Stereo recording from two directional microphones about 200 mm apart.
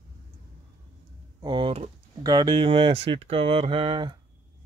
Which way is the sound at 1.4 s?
25° right (ahead or behind).